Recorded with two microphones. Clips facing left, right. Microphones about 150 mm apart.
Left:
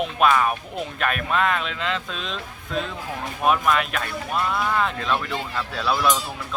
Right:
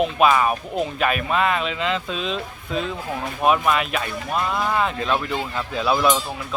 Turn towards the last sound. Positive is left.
turn(degrees=-5)  # may be behind; listen again after turning